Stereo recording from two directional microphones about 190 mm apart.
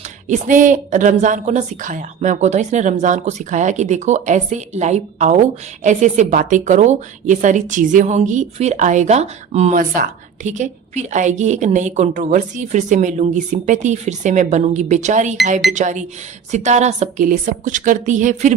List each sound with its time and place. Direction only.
0.3 s a woman's voice: 40° right (ahead or behind)